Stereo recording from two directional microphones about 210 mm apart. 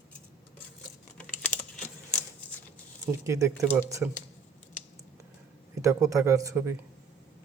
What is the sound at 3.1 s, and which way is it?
Speech, 15° right (ahead or behind).